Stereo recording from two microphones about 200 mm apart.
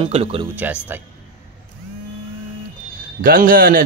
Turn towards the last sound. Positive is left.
turn(degrees=-45)  # may be behind; listen again after turning